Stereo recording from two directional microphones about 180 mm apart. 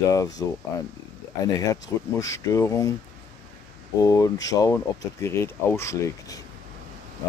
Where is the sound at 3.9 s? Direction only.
20° left (ahead or behind).